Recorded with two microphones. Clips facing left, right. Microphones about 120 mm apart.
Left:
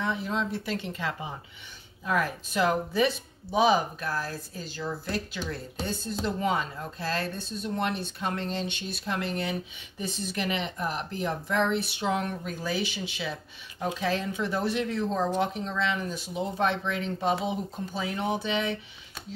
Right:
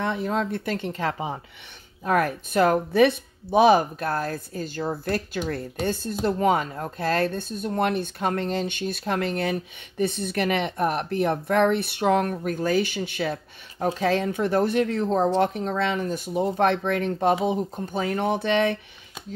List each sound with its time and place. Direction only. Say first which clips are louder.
0.0 s speech: right 4 dB; 55° right (ahead or behind)